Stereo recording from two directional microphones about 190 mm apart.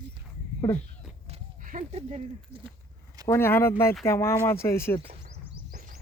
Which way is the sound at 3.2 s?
15° left (ahead or behind).